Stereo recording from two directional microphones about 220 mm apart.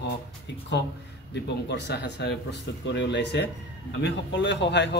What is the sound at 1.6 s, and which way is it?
A man's voice, 50° left (ahead or behind).